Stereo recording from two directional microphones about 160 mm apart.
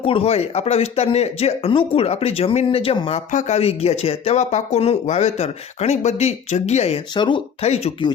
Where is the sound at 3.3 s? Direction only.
45° left (ahead or behind); by 7.4 s 30° left (ahead or behind).